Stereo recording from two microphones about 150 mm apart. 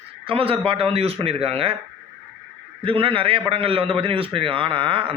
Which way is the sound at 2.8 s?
35° right (ahead or behind).